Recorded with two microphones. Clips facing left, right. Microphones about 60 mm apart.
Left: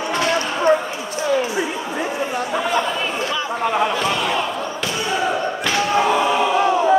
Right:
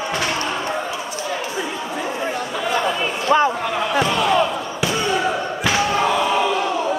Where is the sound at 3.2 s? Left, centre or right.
Right.